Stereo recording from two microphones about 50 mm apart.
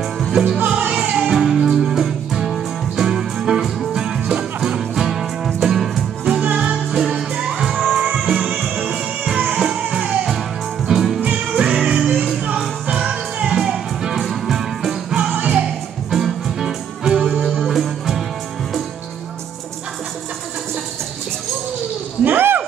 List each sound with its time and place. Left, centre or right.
0.2 s music: centre
0.7 s music: right; by 6.0 s centre
6.4 s music: right
6.7 s music: centre
8.0 s music: right
8.4 s music: centre
11.1 s music: right; by 12.1 s centre
13.1 s music: right
13.6 s music: centre
22.2 s a sound: right